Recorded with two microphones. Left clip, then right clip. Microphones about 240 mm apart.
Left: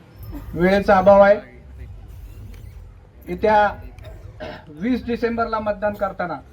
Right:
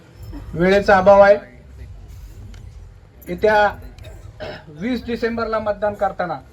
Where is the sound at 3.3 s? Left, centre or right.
Right.